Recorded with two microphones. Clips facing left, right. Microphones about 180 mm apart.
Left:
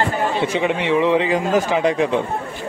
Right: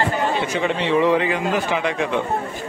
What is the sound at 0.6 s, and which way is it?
Speech, 15° left (ahead or behind).